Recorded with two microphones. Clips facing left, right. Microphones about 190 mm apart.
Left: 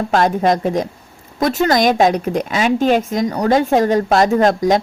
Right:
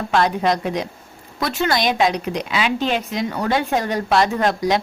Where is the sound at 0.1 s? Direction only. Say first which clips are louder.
Left 3 dB; 45° left (ahead or behind).